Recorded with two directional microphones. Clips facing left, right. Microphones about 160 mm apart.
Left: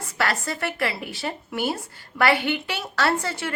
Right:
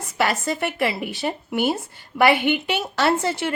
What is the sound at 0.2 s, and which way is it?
A woman's voice, 20° right (ahead or behind).